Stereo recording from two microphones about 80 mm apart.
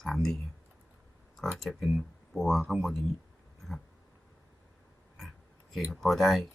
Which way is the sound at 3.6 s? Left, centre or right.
Centre.